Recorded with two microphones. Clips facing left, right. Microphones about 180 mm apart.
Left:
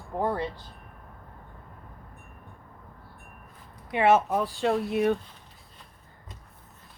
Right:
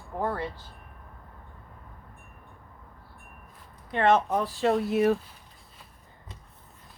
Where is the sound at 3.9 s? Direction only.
10° left (ahead or behind).